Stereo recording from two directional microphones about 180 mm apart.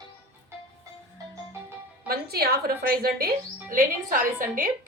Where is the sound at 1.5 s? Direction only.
15° right (ahead or behind).